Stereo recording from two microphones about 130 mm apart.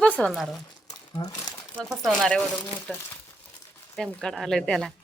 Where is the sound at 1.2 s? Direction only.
35° left (ahead or behind).